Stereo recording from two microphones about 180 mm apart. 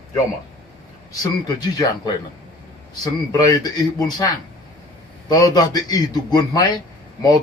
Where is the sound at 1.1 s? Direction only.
20° left (ahead or behind).